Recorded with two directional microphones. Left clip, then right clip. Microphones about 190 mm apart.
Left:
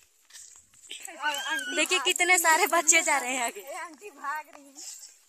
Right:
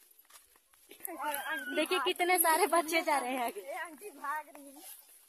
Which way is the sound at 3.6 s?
40° left (ahead or behind).